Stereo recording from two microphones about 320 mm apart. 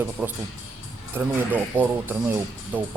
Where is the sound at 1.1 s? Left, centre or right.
Centre.